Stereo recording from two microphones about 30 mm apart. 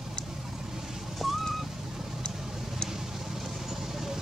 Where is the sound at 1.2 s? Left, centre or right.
Centre.